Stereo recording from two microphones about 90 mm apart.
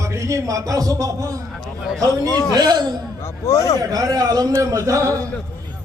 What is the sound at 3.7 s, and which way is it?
A man's voice, 45° right (ahead or behind).